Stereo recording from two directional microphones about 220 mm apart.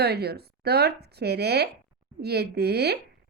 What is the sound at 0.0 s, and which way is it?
A woman's voice, 45° right (ahead or behind).